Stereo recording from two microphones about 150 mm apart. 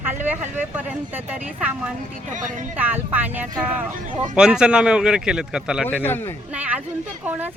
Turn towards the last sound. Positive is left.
turn(degrees=-10)  # may be behind; listen again after turning